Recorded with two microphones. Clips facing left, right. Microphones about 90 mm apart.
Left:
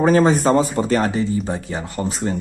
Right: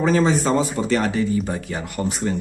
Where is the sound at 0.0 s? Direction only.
45° left (ahead or behind).